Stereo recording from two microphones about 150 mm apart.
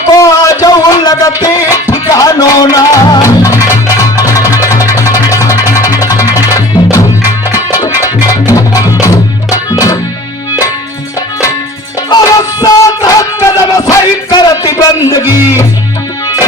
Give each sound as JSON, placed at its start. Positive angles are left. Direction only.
{"t": 0.1, "sound": "music", "side_deg": 20}
{"t": 12.0, "sound": "music", "side_deg": 25}